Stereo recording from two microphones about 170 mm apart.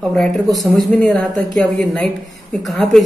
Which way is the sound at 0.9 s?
5° left (ahead or behind).